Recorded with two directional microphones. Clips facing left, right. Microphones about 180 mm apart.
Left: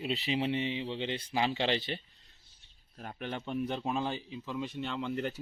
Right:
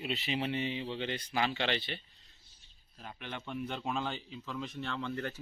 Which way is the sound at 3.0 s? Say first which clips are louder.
Left 5 dB; 45° left (ahead or behind).